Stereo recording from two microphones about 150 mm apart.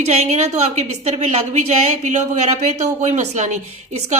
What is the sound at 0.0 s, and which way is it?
A woman's voice, 45° right (ahead or behind).